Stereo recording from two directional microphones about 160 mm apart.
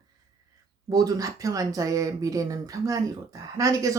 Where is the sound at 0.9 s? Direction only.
25° right (ahead or behind).